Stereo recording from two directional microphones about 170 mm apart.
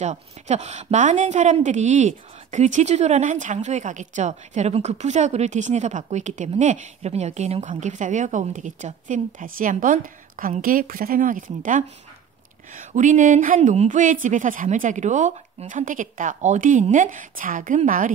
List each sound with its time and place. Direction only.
0.0 s speech: 40° right (ahead or behind)